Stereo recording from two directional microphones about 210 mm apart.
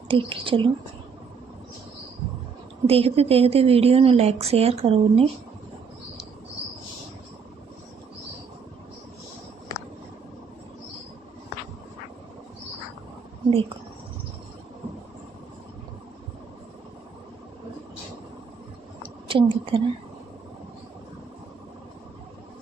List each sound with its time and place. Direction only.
0.1 s a woman's voice: 25° right (ahead or behind)
2.8 s a woman's voice: 30° right (ahead or behind)
19.3 s a sound: 25° right (ahead or behind)